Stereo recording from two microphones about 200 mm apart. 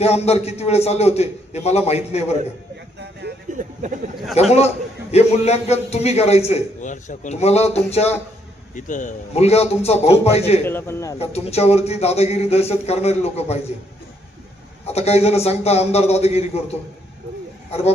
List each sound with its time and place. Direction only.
0.0 s a man's voice: 30° left (ahead or behind)
3.5 s a sound: 40° right (ahead or behind)
4.4 s a man's voice: 30° left (ahead or behind)
10.7 s speech: 10° left (ahead or behind)
11.2 s a man's voice: 30° left (ahead or behind)
14.8 s a man's voice: 30° left (ahead or behind)
17.7 s speech: 30° left (ahead or behind)